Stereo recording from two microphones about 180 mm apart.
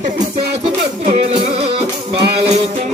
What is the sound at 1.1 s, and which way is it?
Music, 30° right (ahead or behind).